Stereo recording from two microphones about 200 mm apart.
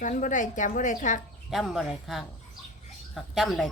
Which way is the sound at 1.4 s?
Centre (ahead or behind).